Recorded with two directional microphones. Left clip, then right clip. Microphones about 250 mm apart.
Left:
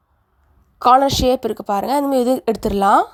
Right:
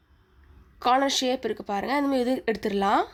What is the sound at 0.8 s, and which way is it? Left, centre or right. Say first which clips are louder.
A woman's voice: left 10 dB; left.